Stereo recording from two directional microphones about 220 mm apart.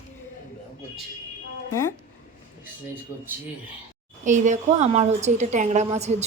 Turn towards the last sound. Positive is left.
turn(degrees=-30)  # may be behind; listen again after turning